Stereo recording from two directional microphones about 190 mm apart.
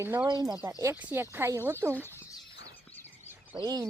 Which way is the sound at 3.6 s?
20° right (ahead or behind).